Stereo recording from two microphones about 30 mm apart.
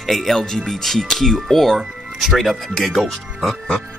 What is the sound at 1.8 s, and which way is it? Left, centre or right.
Music, centre.